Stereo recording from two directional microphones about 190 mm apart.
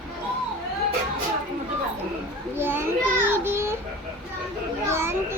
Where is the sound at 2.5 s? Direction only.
10° right (ahead or behind).